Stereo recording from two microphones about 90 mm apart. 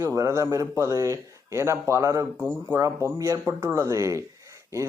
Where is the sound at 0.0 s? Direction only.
35° right (ahead or behind).